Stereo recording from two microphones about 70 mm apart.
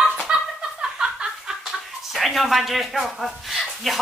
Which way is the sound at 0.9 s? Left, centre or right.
Centre.